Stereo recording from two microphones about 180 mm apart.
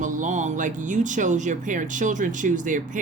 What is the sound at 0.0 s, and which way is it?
Speech, 45° right (ahead or behind).